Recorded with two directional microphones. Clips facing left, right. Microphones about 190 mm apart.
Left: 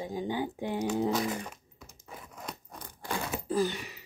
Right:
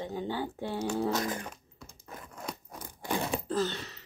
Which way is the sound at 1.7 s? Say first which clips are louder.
Right 1 dB; 15° left (ahead or behind).